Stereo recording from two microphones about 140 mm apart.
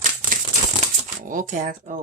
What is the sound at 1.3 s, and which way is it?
Speech, 65° right (ahead or behind).